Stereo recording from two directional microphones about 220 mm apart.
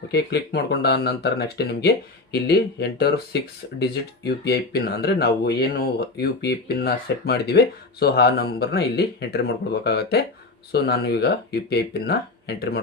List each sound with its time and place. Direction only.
0.1 s speech: 45° left (ahead or behind)